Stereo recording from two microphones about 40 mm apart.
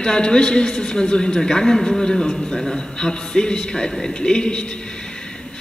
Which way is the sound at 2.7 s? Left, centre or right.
Centre.